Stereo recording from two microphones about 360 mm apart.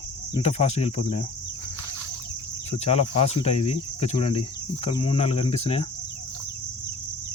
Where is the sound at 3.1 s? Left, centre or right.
Centre.